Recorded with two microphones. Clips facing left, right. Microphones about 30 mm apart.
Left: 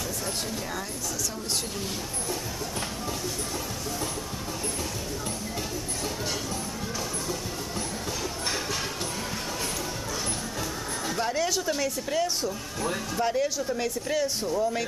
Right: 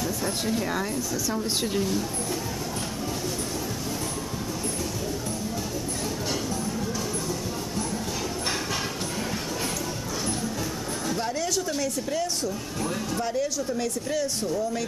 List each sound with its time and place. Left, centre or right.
11.1 s speech: centre